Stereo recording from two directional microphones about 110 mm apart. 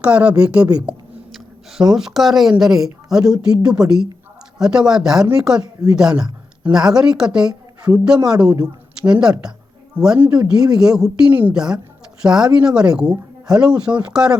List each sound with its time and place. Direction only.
0.0 s speech: 10° right (ahead or behind)
2.0 s speech: 5° right (ahead or behind)
8.6 s a sound: 5° right (ahead or behind)
9.2 s speech: 5° right (ahead or behind)